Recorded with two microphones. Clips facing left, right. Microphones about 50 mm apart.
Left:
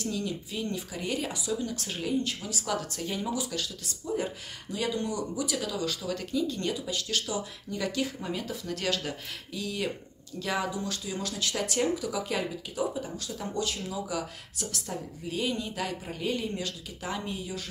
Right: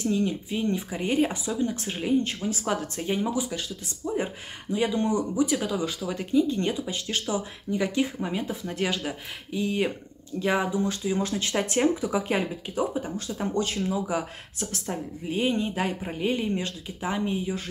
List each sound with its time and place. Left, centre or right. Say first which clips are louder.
0.0 s speech: right 7 dB; right